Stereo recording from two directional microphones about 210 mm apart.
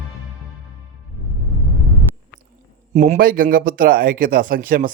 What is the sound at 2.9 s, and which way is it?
Speech, 35° right (ahead or behind).